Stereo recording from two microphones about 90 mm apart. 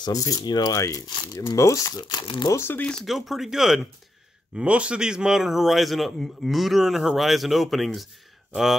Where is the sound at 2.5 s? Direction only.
25° left (ahead or behind).